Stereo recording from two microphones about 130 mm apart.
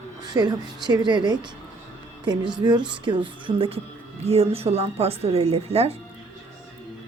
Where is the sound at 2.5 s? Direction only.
35° right (ahead or behind); by 5.9 s 50° right (ahead or behind).